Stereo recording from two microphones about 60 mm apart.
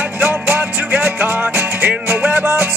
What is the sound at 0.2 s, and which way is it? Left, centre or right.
Music, right.